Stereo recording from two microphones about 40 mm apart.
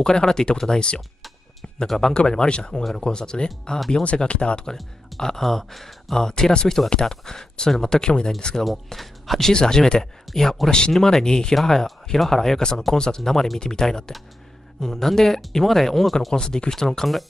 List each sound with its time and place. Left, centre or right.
0.0 s speech: centre
3.9 s speech: left
4.7 s speech: centre
6.1 s speech: centre
9.5 s speech: centre
16.3 s speech: centre